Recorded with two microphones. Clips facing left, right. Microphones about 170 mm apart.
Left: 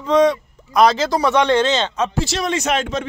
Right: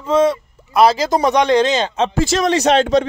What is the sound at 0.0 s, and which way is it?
Speech, 5° right (ahead or behind).